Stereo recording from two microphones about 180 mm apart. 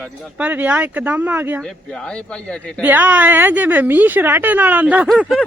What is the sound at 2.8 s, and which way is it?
A woman's voice, 10° right (ahead or behind).